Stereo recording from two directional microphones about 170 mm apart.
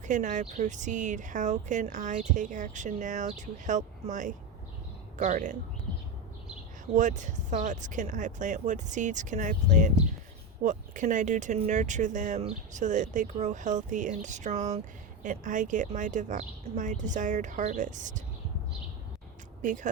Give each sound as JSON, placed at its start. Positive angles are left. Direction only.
{"t": 0.0, "sound": "speech", "side_deg": -45}
{"t": 6.9, "sound": "speech", "side_deg": -45}
{"t": 19.6, "sound": "speech", "side_deg": -45}